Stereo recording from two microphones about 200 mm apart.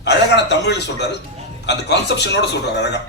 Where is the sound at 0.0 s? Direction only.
60° left (ahead or behind).